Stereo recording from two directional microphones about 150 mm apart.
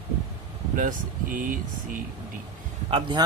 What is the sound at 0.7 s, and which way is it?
Speech, 65° right (ahead or behind).